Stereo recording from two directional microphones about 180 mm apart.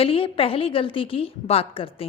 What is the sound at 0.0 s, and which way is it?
A woman's voice, 30° left (ahead or behind).